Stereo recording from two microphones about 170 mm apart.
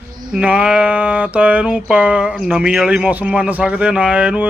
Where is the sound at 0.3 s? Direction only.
5° right (ahead or behind).